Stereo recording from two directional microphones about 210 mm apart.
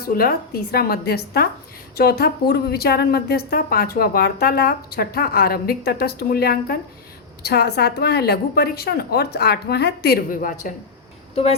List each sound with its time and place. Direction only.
0.0 s a woman's voice: 45° left (ahead or behind)